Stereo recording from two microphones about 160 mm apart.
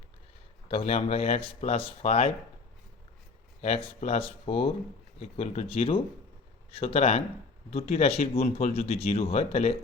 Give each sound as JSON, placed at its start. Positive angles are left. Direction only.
{"t": 0.7, "sound": "speech", "side_deg": 40}
{"t": 3.6, "sound": "speech", "side_deg": 40}